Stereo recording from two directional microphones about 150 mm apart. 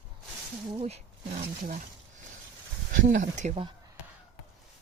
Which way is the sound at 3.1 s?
55° right (ahead or behind).